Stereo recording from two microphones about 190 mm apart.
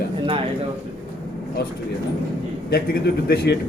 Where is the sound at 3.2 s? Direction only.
60° left (ahead or behind).